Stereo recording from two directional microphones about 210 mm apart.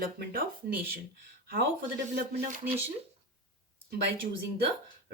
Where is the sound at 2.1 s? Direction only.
50° right (ahead or behind).